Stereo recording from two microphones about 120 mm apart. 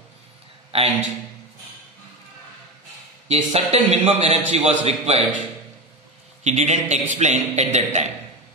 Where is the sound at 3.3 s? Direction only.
60° right (ahead or behind).